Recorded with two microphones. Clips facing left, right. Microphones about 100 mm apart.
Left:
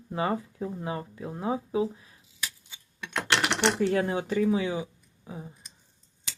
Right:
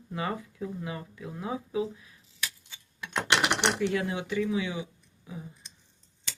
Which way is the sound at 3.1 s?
15° right (ahead or behind).